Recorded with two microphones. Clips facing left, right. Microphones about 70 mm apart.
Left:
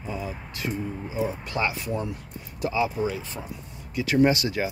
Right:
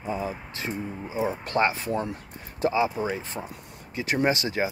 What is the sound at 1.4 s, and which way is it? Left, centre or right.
Speech, right.